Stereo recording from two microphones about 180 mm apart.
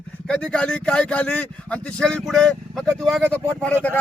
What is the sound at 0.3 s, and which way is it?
A man's voice, 5° left (ahead or behind).